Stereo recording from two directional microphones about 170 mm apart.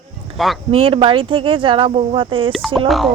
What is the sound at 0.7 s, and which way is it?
A woman's voice, 35° right (ahead or behind).